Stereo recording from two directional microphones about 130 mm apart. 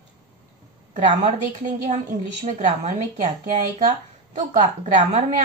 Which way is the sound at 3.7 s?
45° right (ahead or behind).